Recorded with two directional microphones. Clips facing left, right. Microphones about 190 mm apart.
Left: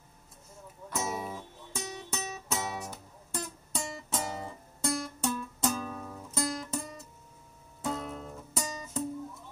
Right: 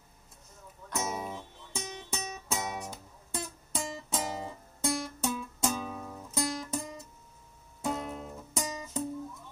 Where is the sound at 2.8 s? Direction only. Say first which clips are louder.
Even; centre (ahead or behind).